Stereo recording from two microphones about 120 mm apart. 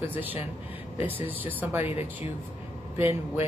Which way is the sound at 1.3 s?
15° right (ahead or behind).